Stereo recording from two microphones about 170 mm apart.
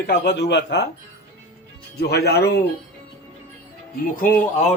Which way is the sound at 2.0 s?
70° left (ahead or behind).